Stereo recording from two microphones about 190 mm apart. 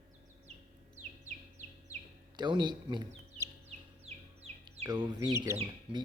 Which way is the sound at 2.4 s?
25° right (ahead or behind).